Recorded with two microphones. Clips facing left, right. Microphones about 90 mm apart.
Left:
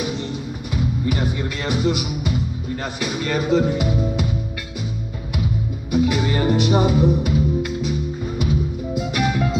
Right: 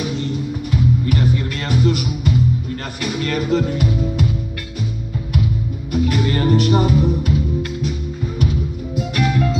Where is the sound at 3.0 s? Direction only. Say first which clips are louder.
Right 2 dB; 15° left (ahead or behind).